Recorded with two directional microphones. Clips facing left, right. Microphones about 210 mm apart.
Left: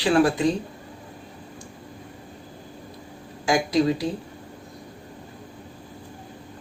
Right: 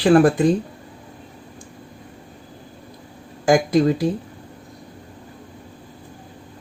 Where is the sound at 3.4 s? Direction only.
50° right (ahead or behind).